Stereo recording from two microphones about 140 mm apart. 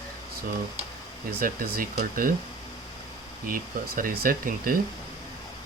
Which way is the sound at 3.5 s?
90° right.